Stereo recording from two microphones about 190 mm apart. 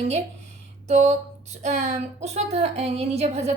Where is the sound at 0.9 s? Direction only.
35° right (ahead or behind).